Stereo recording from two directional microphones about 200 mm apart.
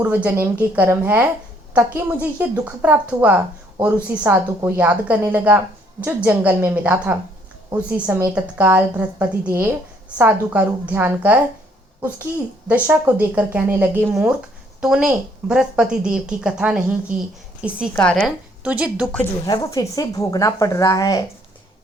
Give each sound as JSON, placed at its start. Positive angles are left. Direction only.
{"t": 0.0, "sound": "a woman's voice", "side_deg": -10}
{"t": 17.9, "sound": "a woman's voice", "side_deg": 5}
{"t": 18.6, "sound": "a woman's voice", "side_deg": -5}
{"t": 19.5, "sound": "speech", "side_deg": 20}